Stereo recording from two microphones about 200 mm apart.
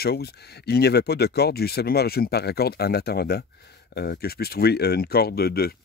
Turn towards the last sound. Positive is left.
turn(degrees=50)  # may be behind; listen again after turning